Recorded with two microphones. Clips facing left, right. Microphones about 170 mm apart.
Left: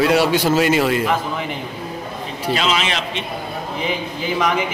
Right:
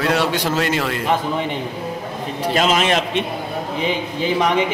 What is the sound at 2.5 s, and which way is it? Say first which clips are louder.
Speech: right 5 dB; 45° right (ahead or behind).